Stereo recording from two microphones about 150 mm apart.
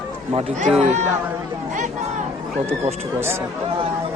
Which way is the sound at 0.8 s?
50° right (ahead or behind).